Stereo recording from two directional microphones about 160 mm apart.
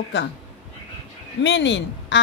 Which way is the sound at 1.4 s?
90° left.